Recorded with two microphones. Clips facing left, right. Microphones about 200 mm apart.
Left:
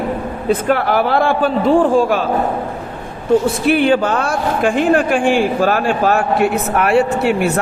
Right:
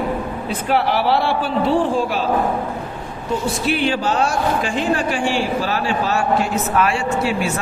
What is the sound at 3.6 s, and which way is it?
A man's voice, 55° left (ahead or behind).